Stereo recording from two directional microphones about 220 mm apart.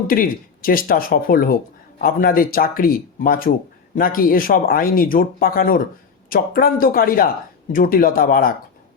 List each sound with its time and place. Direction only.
0.1 s speech: 40° left (ahead or behind)